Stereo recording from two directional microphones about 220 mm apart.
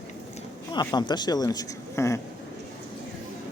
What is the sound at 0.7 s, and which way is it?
Speech, 20° left (ahead or behind).